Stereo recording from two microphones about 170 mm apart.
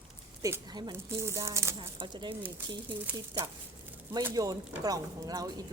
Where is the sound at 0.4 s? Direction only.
20° right (ahead or behind).